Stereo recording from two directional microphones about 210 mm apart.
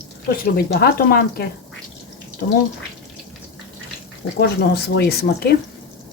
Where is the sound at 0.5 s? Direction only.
50° left (ahead or behind).